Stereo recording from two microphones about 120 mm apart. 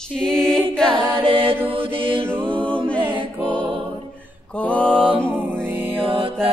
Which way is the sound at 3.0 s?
45° right (ahead or behind).